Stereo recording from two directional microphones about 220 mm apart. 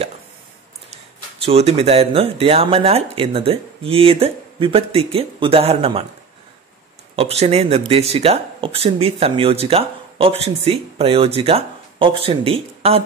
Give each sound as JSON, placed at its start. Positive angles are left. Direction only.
{"t": 1.4, "sound": "speech", "side_deg": -25}
{"t": 7.2, "sound": "speech", "side_deg": -30}